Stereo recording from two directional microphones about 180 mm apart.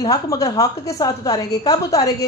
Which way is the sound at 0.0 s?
20° left (ahead or behind).